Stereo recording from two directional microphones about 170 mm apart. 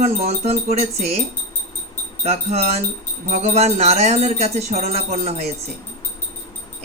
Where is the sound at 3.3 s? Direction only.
40° right (ahead or behind).